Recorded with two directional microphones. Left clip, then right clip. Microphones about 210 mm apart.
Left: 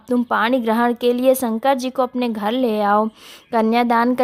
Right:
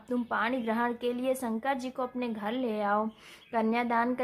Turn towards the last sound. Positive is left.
turn(degrees=50)  # may be behind; listen again after turning